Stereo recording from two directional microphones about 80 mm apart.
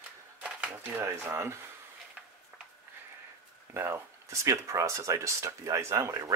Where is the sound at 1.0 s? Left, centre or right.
Right.